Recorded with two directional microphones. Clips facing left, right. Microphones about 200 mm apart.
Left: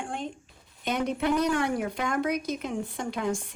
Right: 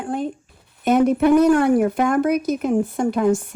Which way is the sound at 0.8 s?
45° right (ahead or behind).